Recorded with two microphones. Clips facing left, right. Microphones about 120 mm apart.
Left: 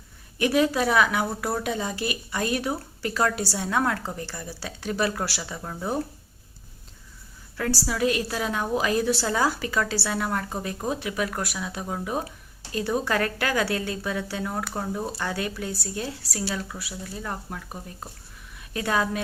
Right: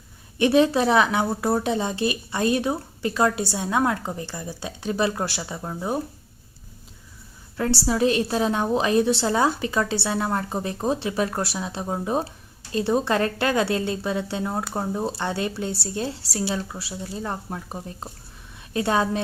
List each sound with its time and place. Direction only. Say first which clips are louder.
0.3 s speech: right 4 dB; 25° right (ahead or behind)
7.5 s speech: right 4 dB; 25° right (ahead or behind)